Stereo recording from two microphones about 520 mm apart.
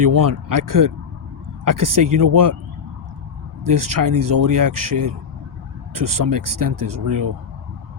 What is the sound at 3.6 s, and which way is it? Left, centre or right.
Speech, right.